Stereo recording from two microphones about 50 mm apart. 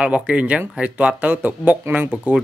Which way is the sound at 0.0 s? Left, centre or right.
Right.